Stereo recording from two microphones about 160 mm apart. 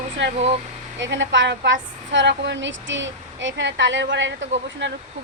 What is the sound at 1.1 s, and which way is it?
Speech, 90° right.